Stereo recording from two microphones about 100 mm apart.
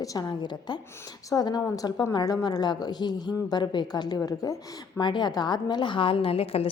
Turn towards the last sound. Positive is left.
turn(degrees=75)  # may be behind; listen again after turning